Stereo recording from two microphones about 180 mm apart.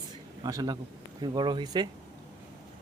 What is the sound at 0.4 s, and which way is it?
Speech, 20° right (ahead or behind).